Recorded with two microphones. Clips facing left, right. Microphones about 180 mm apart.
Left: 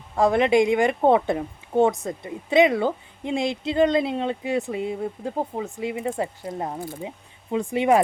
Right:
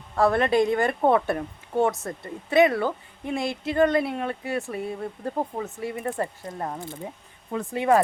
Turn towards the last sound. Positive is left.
turn(degrees=15)  # may be behind; listen again after turning